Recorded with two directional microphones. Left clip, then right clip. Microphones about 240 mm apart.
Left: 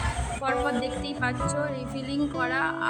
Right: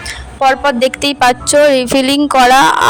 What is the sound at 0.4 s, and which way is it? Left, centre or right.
A woman's voice, right.